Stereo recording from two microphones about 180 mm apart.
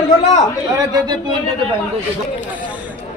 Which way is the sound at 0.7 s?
20° right (ahead or behind).